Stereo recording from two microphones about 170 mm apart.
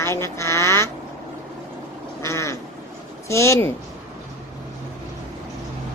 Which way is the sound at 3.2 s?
15° left (ahead or behind).